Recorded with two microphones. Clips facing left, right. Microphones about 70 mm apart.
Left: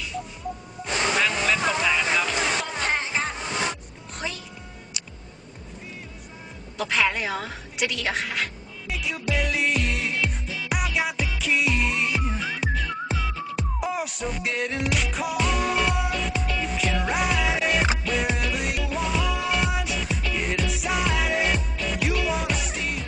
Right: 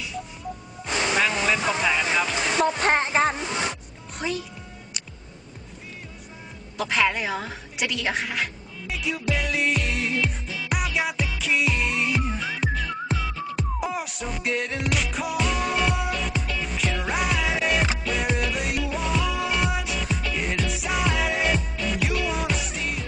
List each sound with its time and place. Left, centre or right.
1.1 s music: centre
2.6 s music: right
6.8 s a woman's voice: centre
8.9 s music: centre